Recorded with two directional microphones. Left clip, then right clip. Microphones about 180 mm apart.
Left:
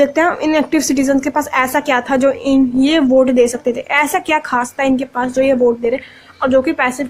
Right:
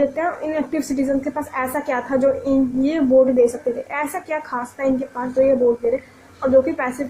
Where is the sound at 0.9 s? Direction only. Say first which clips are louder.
Left 7 dB; 45° left (ahead or behind).